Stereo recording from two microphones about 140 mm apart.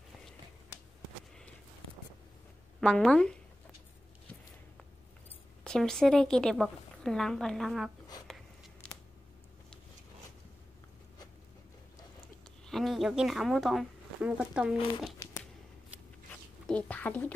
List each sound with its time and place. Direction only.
2.8 s a woman's voice: 5° left (ahead or behind)
5.6 s a woman's voice: 5° left (ahead or behind)
8.8 s a sound: 10° left (ahead or behind)
12.6 s speech: centre (ahead or behind)
15.2 s a sound: 20° left (ahead or behind)
16.6 s speech: 10° left (ahead or behind)